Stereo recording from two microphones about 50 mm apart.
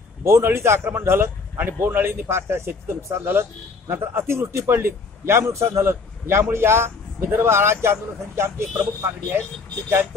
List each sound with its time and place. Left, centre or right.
0.2 s a man's voice: right